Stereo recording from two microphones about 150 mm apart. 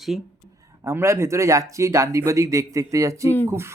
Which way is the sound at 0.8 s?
20° right (ahead or behind).